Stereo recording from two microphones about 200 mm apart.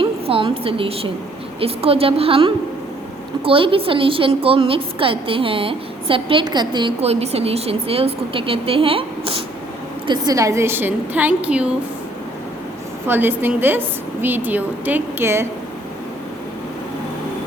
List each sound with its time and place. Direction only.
0.0 s a woman's voice: 25° right (ahead or behind); by 11.7 s 5° right (ahead or behind)
13.1 s a woman's voice: 10° right (ahead or behind)